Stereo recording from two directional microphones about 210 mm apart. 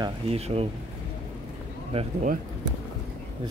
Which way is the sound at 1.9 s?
30° right (ahead or behind).